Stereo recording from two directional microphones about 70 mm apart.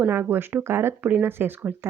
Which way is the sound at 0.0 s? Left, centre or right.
Right.